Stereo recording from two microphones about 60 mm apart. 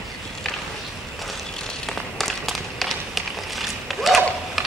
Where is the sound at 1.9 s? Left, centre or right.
Centre.